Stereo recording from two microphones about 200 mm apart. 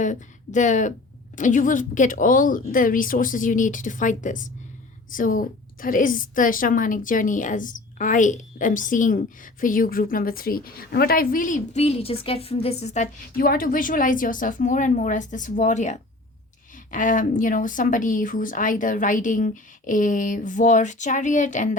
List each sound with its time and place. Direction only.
0.0 s a woman's voice: 40° left (ahead or behind)
13.3 s a woman's voice: 45° left (ahead or behind)